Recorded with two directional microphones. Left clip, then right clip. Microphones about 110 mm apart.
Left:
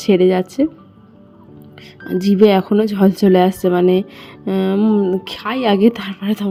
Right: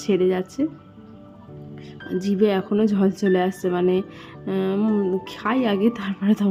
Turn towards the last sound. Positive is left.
turn(degrees=45)  # may be behind; listen again after turning